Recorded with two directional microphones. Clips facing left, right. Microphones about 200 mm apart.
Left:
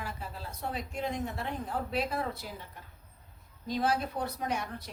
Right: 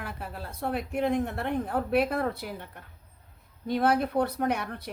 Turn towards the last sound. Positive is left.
turn(degrees=-60)  # may be behind; listen again after turning